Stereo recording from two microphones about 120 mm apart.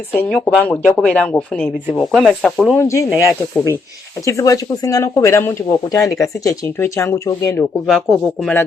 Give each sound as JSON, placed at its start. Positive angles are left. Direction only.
{"t": 0.3, "sound": "speech", "side_deg": 10}
{"t": 2.7, "sound": "speech", "side_deg": 25}
{"t": 7.9, "sound": "speech", "side_deg": 0}